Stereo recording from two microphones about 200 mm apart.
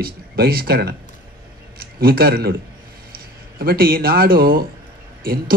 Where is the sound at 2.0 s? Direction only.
50° right (ahead or behind).